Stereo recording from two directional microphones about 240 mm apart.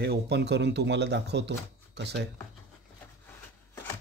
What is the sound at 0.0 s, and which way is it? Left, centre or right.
Speech, right.